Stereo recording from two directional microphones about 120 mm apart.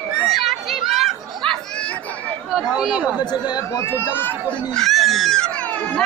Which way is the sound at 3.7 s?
20° left (ahead or behind).